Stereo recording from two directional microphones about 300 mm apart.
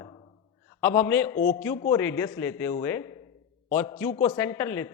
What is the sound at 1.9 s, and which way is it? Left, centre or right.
A man's voice, centre.